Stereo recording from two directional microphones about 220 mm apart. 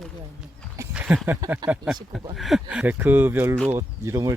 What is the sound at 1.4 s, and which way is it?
Speech, 15° right (ahead or behind).